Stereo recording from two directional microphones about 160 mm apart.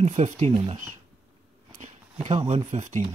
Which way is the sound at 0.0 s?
45° right (ahead or behind).